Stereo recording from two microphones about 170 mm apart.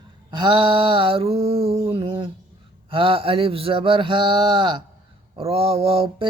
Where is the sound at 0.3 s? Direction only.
25° right (ahead or behind).